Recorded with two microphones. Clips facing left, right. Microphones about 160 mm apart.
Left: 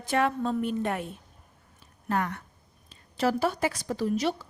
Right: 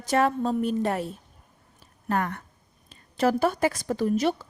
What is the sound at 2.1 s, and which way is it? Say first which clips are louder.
A woman's voice: right 2 dB; 50° right (ahead or behind).